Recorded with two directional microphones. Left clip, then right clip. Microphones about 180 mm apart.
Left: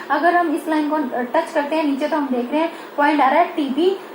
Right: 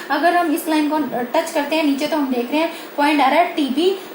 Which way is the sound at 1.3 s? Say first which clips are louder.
Even; 35° right (ahead or behind).